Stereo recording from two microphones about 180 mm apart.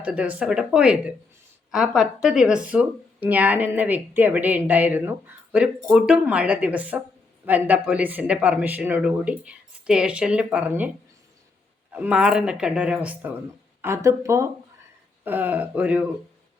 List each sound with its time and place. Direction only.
0.0 s speech: 5° right (ahead or behind)